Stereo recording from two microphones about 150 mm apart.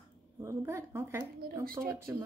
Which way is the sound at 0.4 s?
20° right (ahead or behind).